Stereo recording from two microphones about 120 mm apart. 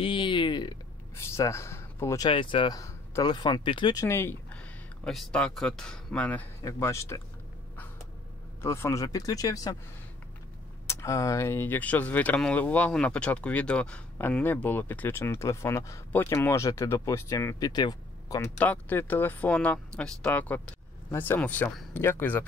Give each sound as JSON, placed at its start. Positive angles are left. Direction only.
{"t": 0.0, "sound": "a sound", "side_deg": 45}
{"t": 1.1, "sound": "speech", "side_deg": 25}
{"t": 2.2, "sound": "speech", "side_deg": 45}
{"t": 2.7, "sound": "speech", "side_deg": 30}
{"t": 3.9, "sound": "speech", "side_deg": 25}
{"t": 6.6, "sound": "speech", "side_deg": 25}
{"t": 8.6, "sound": "speech", "side_deg": 20}
{"t": 10.9, "sound": "speech", "side_deg": 25}
{"t": 18.6, "sound": "speech", "side_deg": 15}